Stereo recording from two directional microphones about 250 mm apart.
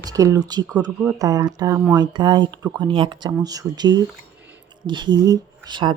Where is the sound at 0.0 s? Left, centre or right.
Centre.